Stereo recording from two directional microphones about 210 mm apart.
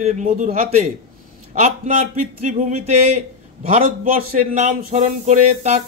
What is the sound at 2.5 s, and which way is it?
Speech, 35° right (ahead or behind).